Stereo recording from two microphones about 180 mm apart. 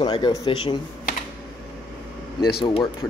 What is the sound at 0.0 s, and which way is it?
Speech, 25° left (ahead or behind).